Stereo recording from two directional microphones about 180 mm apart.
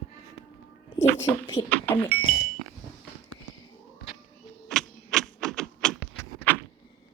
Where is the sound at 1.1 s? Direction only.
20° left (ahead or behind).